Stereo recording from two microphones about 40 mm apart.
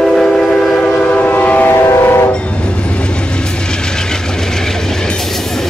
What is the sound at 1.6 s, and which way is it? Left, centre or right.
Train, left.